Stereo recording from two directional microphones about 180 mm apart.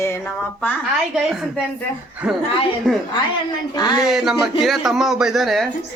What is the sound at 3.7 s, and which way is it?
Speech, 25° left (ahead or behind).